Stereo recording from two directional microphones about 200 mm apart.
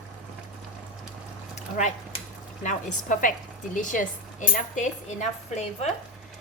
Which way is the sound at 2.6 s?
40° left (ahead or behind).